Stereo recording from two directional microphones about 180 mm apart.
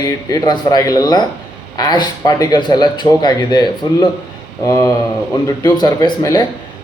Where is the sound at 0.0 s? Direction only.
20° left (ahead or behind).